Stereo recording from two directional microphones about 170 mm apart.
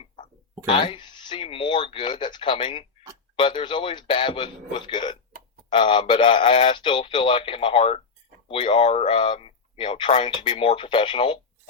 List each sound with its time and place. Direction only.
0.7 s a man's voice: 30° left (ahead or behind)